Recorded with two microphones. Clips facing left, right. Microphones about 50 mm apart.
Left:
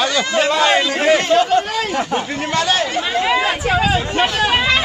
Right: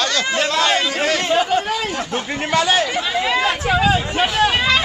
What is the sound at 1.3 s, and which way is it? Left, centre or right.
Speech, centre.